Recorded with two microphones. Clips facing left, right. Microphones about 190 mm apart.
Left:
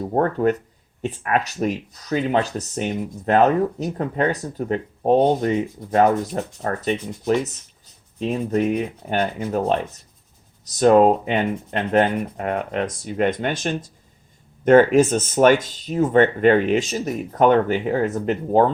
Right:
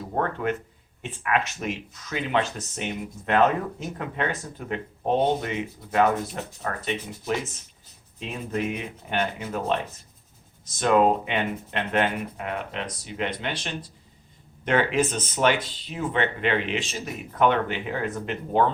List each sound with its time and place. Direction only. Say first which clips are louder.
0.1 s speech: left 7 dB; 40° left (ahead or behind)